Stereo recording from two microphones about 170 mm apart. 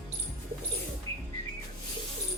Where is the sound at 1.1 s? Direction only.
30° right (ahead or behind).